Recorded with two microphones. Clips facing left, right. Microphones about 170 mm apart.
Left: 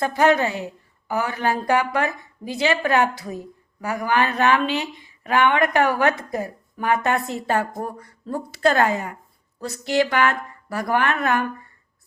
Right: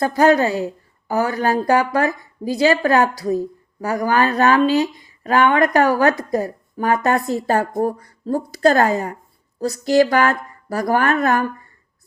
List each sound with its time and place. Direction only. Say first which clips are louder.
0.0 s a woman's voice: right 4 dB; 40° right (ahead or behind)